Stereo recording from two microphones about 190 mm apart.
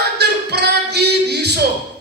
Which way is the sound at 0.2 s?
60° right (ahead or behind).